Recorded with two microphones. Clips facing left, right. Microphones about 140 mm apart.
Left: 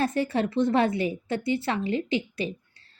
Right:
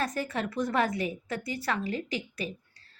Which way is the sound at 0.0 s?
30° left (ahead or behind).